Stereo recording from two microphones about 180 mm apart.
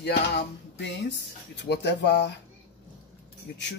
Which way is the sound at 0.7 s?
75° left (ahead or behind).